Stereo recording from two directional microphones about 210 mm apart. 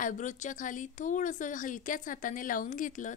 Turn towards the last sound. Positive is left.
turn(degrees=40)  # may be behind; listen again after turning